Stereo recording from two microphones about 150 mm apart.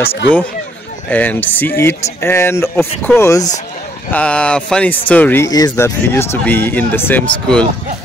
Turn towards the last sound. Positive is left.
turn(degrees=10)  # may be behind; listen again after turning